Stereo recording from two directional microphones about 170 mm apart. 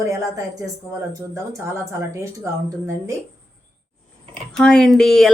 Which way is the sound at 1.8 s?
15° right (ahead or behind).